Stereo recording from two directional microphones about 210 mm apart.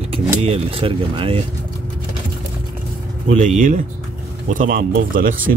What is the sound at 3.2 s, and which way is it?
Speech, 35° right (ahead or behind).